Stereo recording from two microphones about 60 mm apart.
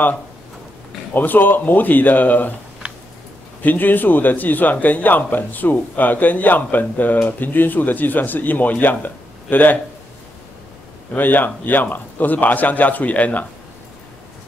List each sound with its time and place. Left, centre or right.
1.1 s a man's voice: left
3.6 s a man's voice: left
11.1 s a man's voice: left